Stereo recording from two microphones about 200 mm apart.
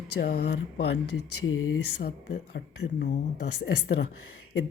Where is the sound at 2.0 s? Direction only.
55° left (ahead or behind).